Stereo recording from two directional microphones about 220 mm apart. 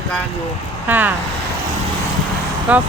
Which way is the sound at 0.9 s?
10° right (ahead or behind).